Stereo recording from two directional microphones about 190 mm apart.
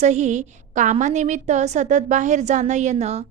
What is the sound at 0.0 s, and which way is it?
A woman's voice, 35° right (ahead or behind).